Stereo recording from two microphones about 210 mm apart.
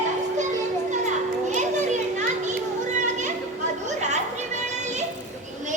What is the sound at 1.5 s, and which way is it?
Children playing, 35° right (ahead or behind).